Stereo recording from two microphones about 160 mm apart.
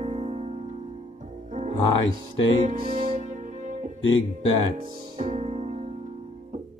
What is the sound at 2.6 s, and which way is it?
Music, 35° right (ahead or behind).